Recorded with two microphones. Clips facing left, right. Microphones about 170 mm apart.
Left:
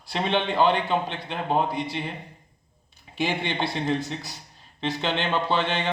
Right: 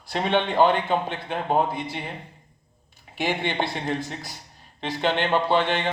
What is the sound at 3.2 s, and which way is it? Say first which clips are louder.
Speech: right 1 dB; 45° right (ahead or behind).